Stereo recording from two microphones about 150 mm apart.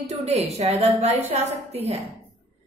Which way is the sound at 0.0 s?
45° right (ahead or behind).